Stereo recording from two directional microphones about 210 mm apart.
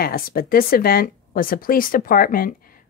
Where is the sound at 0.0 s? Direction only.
45° left (ahead or behind).